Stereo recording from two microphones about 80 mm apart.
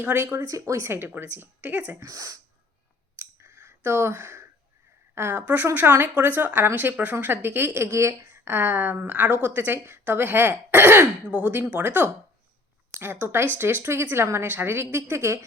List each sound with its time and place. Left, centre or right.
0.0 s a woman's voice: right
0.4 s speech: right
0.9 s a woman's voice: right
2.0 s speech: right
3.2 s clicking: right
5.1 s a woman's voice: right
11.3 s a woman's voice: right